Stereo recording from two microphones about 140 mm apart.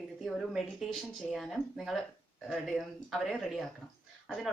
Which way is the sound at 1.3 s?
Centre (ahead or behind).